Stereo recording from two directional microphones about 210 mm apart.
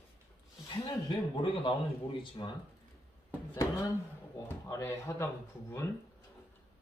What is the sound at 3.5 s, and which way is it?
Speech, 15° left (ahead or behind).